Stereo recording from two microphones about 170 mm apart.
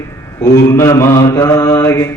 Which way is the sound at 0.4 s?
20° left (ahead or behind).